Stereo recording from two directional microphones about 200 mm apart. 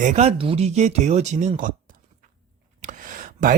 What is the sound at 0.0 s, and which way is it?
A man's voice, 35° right (ahead or behind).